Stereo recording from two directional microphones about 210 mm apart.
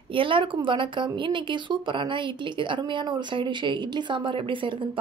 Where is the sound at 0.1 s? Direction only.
25° right (ahead or behind).